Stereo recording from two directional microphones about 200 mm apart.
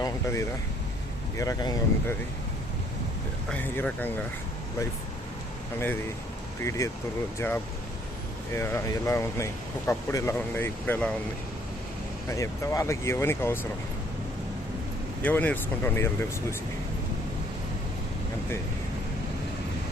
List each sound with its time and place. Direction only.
0.0 s speech: 15° left (ahead or behind)
3.5 s speech: 5° left (ahead or behind)
6.6 s speech: 15° left (ahead or behind)
12.3 s speech: 15° left (ahead or behind)
15.2 s speech: 10° left (ahead or behind)